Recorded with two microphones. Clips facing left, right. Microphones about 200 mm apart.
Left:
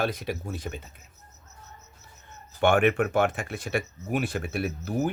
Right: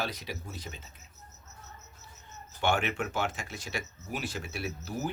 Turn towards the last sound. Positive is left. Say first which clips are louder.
# left 7 dB
turn(degrees=55)  # may be behind; listen again after turning